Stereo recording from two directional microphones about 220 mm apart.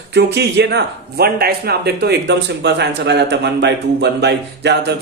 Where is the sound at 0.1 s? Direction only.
50° right (ahead or behind).